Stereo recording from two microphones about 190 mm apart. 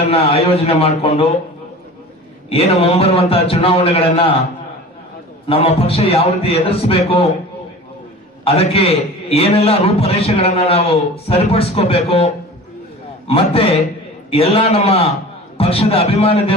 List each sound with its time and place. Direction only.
0.0 s a man's voice: 30° left (ahead or behind)
2.5 s a man's voice: 30° left (ahead or behind)
5.5 s a man's voice: 30° left (ahead or behind)
8.5 s a man's voice: 30° left (ahead or behind)
13.3 s a man's voice: 30° left (ahead or behind)